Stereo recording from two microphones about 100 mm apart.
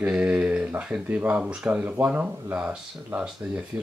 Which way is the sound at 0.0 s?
15° right (ahead or behind).